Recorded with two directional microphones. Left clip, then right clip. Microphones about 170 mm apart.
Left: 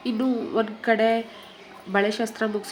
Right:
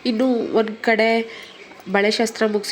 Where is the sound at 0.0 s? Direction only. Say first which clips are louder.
Right 6 dB; 25° right (ahead or behind).